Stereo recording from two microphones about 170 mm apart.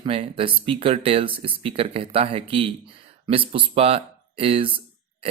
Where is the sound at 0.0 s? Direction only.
35° right (ahead or behind).